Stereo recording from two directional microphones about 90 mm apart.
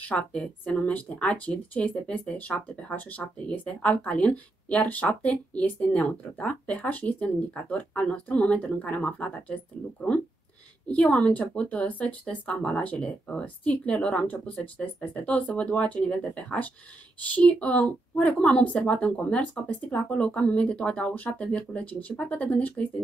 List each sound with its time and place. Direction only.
0.0 s speech: 15° left (ahead or behind)